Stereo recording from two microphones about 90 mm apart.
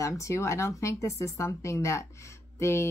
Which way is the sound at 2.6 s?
30° left (ahead or behind).